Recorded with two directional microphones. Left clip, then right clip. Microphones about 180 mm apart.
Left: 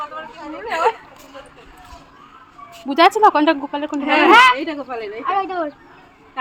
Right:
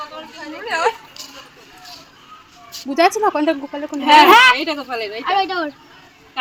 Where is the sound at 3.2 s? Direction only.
5° left (ahead or behind).